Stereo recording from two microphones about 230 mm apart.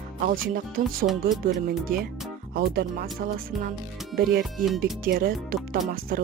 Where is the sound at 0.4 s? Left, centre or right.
Right.